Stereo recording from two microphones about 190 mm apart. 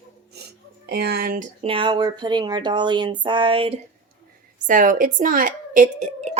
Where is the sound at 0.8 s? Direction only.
60° right (ahead or behind).